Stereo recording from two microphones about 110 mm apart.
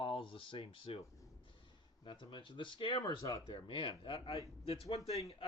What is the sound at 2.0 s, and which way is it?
Speech, 50° left (ahead or behind).